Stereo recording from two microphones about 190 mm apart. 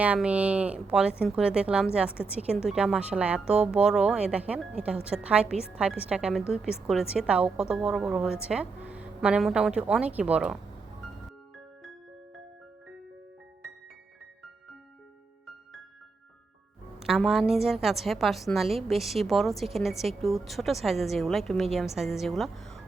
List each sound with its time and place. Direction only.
0.0 s a woman's voice: 5° right (ahead or behind)
17.0 s a woman's voice: centre (ahead or behind)